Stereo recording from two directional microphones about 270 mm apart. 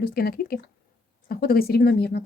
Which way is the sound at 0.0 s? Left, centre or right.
Left.